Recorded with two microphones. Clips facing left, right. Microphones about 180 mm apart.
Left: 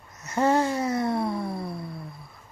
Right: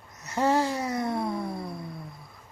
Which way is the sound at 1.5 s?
5° left (ahead or behind).